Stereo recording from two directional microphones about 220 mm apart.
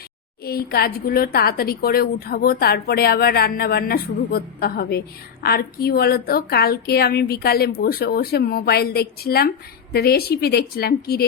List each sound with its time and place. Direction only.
0.4 s a woman's voice: 45° left (ahead or behind)